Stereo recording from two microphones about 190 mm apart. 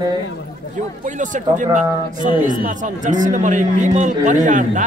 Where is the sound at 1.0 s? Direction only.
40° right (ahead or behind).